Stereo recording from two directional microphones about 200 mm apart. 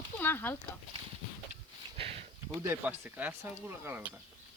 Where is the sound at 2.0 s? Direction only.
30° right (ahead or behind).